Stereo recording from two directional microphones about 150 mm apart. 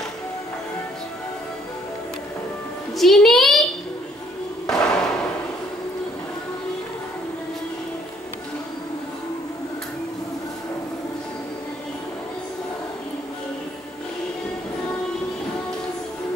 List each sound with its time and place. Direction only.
3.0 s music: centre (ahead or behind)
4.6 s thump: 5° left (ahead or behind)